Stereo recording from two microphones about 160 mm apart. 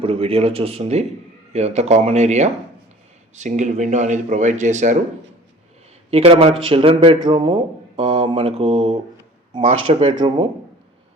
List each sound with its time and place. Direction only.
0.0 s speech: 35° right (ahead or behind)
6.1 s speech: 40° right (ahead or behind)
10.2 s speech: 30° right (ahead or behind)